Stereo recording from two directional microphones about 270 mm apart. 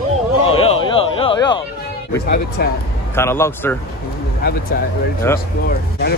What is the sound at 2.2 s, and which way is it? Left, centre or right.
Speech, left.